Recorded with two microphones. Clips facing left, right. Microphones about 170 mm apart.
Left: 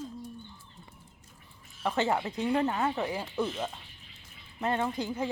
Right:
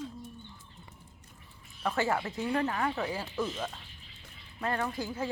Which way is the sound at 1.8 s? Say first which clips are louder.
Left 2 dB; 20° left (ahead or behind).